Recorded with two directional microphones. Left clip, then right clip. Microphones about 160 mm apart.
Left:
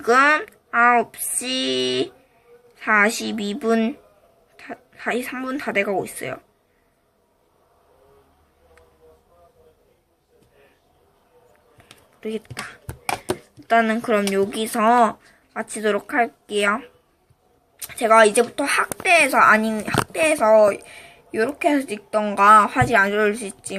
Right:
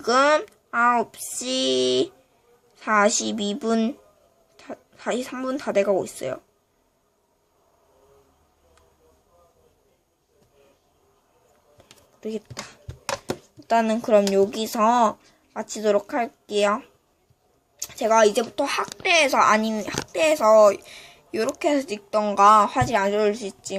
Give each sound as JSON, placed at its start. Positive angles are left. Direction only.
{"t": 0.1, "sound": "speech", "side_deg": -25}
{"t": 12.2, "sound": "speech", "side_deg": -25}
{"t": 18.0, "sound": "speech", "side_deg": -15}